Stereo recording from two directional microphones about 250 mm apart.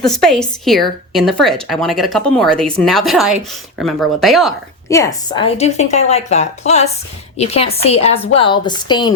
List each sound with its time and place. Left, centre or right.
0.0 s speech: centre
4.9 s a woman's voice: centre